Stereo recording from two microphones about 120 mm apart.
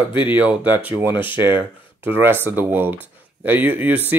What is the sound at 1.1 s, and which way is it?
Speech, 40° left (ahead or behind).